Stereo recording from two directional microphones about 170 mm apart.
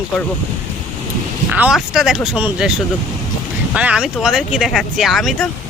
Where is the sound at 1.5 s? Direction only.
10° right (ahead or behind).